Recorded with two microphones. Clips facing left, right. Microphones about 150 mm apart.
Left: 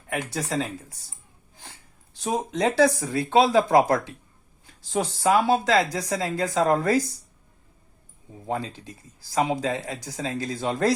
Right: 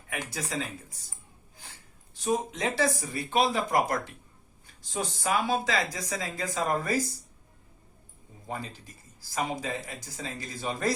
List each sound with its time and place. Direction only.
0.3 s speech: 75° left (ahead or behind)
2.2 s speech: 70° left (ahead or behind)
9.3 s speech: 90° left